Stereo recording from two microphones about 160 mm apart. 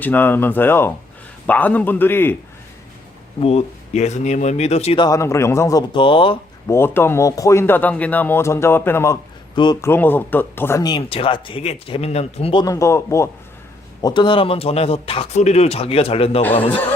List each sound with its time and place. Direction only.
0.0 s speech: 10° left (ahead or behind)
3.4 s speech: 45° left (ahead or behind)
5.0 s speech: 20° left (ahead or behind)
6.7 s speech: 15° left (ahead or behind)
11.1 s speech: 35° left (ahead or behind)
12.6 s speech: 20° left (ahead or behind)
14.0 s speech: 30° left (ahead or behind)